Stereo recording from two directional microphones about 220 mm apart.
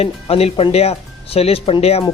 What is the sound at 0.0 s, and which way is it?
Speech, 25° left (ahead or behind).